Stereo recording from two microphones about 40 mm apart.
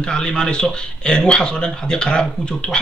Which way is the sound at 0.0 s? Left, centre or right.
Left.